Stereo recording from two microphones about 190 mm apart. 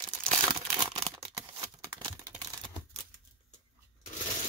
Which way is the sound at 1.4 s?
15° right (ahead or behind).